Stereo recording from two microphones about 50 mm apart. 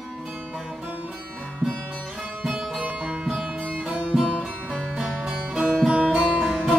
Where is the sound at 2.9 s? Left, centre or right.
Centre.